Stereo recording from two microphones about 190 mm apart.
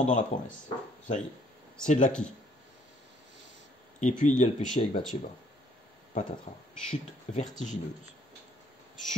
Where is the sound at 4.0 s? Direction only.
40° left (ahead or behind).